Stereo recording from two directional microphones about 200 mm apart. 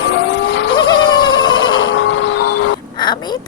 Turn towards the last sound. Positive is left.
turn(degrees=20)  # may be behind; listen again after turning